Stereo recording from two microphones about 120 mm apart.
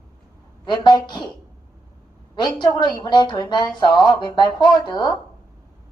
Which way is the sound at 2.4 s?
40° left (ahead or behind).